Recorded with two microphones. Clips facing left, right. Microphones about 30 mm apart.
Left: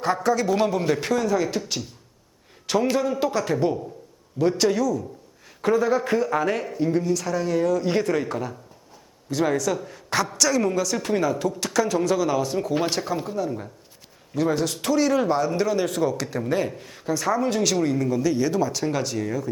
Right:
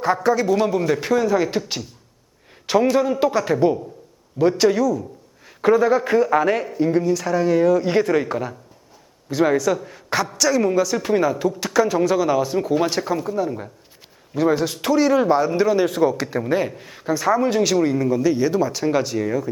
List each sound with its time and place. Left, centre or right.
0.0 s a man's voice: centre
2.9 s a man's voice: centre